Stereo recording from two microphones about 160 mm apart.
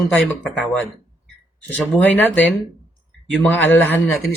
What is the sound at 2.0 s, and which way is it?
Speech, 10° left (ahead or behind).